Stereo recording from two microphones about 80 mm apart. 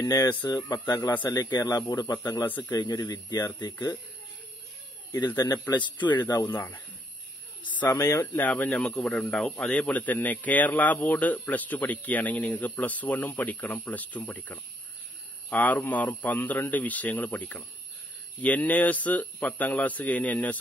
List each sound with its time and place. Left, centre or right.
0.0 s speech: left
0.3 s speech: left
1.7 s speech: left
2.9 s speech: left
5.2 s speech: left
6.3 s speech: left
7.8 s speech: left
8.2 s speech: left
8.6 s a man's voice: centre
9.8 s speech: left
15.5 s speech: left